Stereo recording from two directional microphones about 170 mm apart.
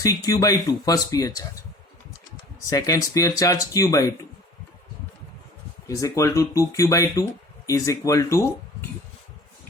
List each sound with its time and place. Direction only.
0.0 s speech: 20° left (ahead or behind)
2.6 s speech: 20° left (ahead or behind)
5.9 s speech: 20° left (ahead or behind)